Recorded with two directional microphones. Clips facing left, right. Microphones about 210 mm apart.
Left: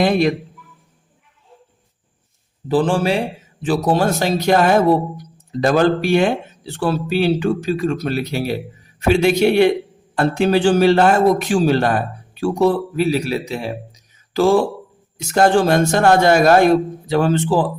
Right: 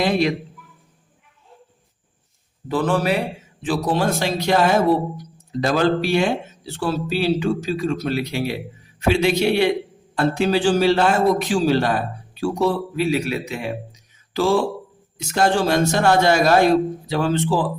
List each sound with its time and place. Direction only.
0.0 s a man's voice: 50° left (ahead or behind)
2.6 s a man's voice: 30° left (ahead or behind)
3.6 s a man's voice: 45° left (ahead or behind)
13.1 s a man's voice: 35° left (ahead or behind)
15.4 s a man's voice: 50° left (ahead or behind)